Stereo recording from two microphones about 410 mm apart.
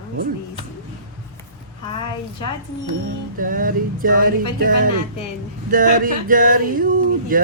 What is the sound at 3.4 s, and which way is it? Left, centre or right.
Male singing, centre.